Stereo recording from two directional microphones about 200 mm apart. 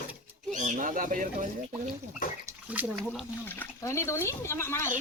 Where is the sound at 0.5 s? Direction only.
40° right (ahead or behind).